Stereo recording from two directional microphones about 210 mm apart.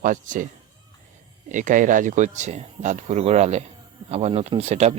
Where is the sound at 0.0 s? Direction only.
40° right (ahead or behind).